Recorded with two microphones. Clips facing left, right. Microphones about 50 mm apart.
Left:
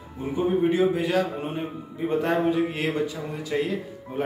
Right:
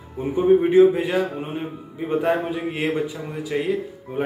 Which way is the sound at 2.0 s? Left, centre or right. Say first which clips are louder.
Right 2 dB; centre.